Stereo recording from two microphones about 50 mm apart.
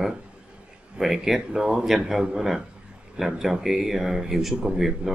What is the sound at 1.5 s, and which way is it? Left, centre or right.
Speech, centre.